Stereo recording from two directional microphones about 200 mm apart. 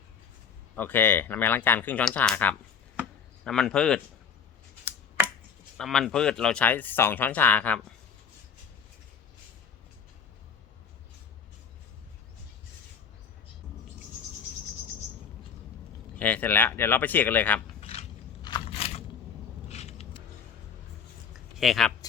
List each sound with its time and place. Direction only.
0.8 s a man's voice: 10° left (ahead or behind)
4.9 s finger snapping: 10° right (ahead or behind)
5.7 s speech: centre (ahead or behind)
16.1 s speech: 5° left (ahead or behind)
17.7 s a sound: 30° left (ahead or behind)
18.4 s crunch: 25° left (ahead or behind)
19.6 s vehicle: 35° left (ahead or behind)
21.6 s a man's voice: centre (ahead or behind)